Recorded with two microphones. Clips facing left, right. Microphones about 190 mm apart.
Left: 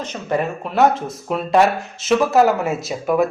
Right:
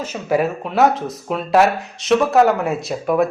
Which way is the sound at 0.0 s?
5° right (ahead or behind).